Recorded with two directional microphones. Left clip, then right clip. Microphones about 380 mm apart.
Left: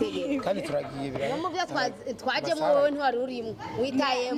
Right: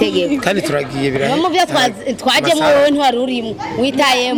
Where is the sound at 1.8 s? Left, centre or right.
Right.